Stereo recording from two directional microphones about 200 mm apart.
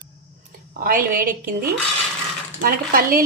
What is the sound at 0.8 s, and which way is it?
A woman's voice, 45° right (ahead or behind).